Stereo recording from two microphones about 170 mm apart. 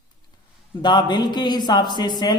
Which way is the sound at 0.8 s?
25° left (ahead or behind).